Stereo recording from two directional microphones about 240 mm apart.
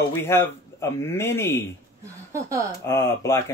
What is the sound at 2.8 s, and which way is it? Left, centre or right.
Speech, centre.